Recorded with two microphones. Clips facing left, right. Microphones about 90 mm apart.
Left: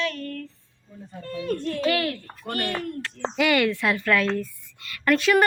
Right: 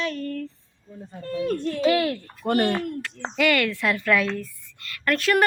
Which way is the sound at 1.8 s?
20° right (ahead or behind).